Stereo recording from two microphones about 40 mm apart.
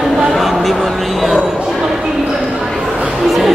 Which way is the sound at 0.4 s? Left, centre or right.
Centre.